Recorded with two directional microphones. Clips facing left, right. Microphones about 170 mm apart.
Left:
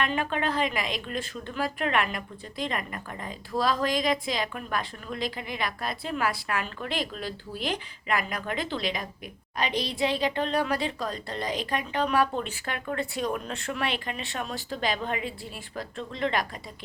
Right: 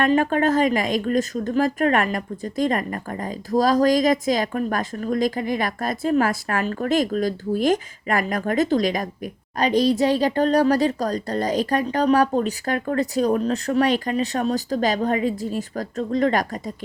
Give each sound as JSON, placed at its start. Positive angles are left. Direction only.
{"t": 0.0, "sound": "a woman's voice", "side_deg": -45}